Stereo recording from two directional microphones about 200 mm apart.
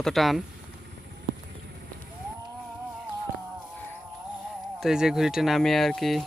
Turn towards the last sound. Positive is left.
turn(degrees=0)  # may be behind; listen again after turning